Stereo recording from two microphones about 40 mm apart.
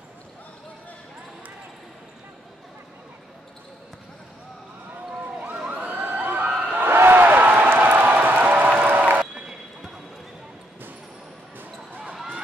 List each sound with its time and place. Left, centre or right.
5.4 s emergency vehicle: right
5.9 s crowd: right
6.7 s a sound: right
8.1 s music: right